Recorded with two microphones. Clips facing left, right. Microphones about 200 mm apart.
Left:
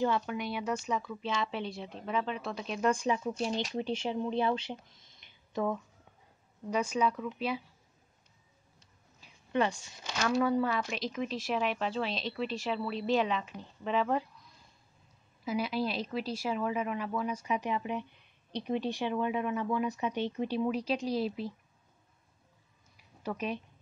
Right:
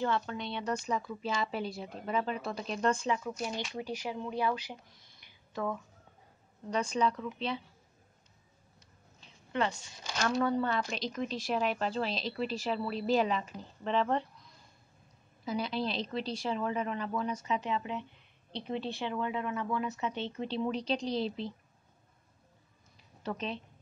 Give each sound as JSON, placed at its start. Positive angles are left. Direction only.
{"t": 0.0, "sound": "a woman's voice", "side_deg": 15}
{"t": 2.9, "sound": "a woman's voice", "side_deg": 15}
{"t": 3.3, "sound": "speech", "side_deg": 30}
{"t": 6.7, "sound": "a woman's voice", "side_deg": 5}
{"t": 9.2, "sound": "a woman's voice", "side_deg": 15}
{"t": 15.4, "sound": "a woman's voice", "side_deg": 5}
{"t": 23.2, "sound": "a woman's voice", "side_deg": 10}